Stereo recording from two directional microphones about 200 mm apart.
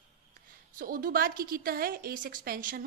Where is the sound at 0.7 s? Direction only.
45° right (ahead or behind).